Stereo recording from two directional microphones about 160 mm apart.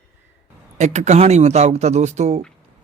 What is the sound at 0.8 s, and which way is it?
Speech, 45° right (ahead or behind).